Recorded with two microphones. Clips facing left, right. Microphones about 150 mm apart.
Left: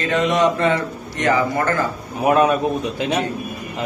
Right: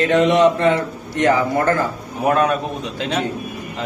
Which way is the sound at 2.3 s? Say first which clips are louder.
Left 1 dB; 10° left (ahead or behind).